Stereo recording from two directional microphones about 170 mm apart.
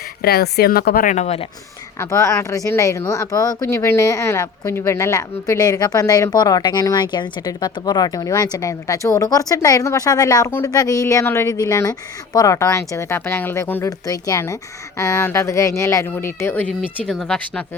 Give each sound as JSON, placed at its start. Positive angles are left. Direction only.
{"t": 0.2, "sound": "speech", "side_deg": 65}
{"t": 1.1, "sound": "speech", "side_deg": 40}
{"t": 2.0, "sound": "speech", "side_deg": 15}